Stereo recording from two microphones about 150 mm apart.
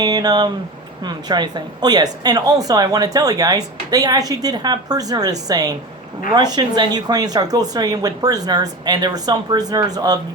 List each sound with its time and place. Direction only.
0.0 s a woman's voice: 25° right (ahead or behind)